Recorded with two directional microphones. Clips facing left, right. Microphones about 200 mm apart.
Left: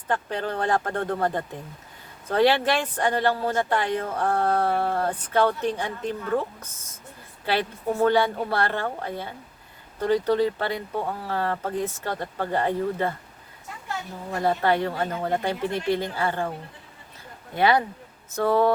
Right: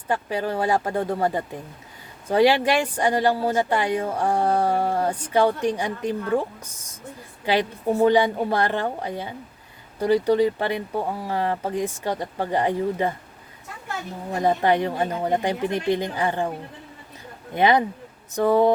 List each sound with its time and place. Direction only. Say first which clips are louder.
0.1 s speech: right 2 dB; 10° right (ahead or behind)
14.3 s speech: right 2 dB; 15° right (ahead or behind)
17.5 s speech: right 2 dB; 20° right (ahead or behind)